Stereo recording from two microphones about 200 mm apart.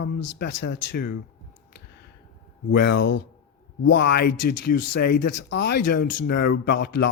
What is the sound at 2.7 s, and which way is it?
Speech, 60° left (ahead or behind).